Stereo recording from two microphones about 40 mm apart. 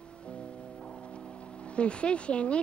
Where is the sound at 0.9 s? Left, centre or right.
Left.